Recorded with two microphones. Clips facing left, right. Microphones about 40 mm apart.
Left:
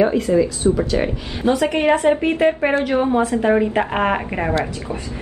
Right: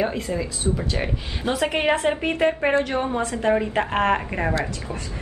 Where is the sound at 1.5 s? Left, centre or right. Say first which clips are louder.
Left 5 dB; centre.